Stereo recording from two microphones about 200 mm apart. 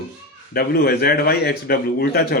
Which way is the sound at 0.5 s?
50° left (ahead or behind).